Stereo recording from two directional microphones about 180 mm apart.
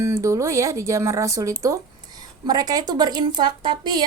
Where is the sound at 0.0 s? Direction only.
15° right (ahead or behind).